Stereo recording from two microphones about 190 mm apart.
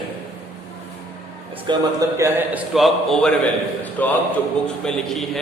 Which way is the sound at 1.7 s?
15° right (ahead or behind).